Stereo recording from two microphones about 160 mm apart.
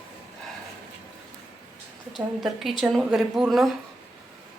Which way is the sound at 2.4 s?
Centre (ahead or behind).